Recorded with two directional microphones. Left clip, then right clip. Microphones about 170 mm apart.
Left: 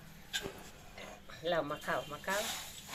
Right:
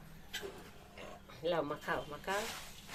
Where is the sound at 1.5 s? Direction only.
40° right (ahead or behind).